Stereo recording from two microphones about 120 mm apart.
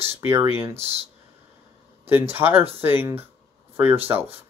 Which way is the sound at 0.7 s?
60° right (ahead or behind).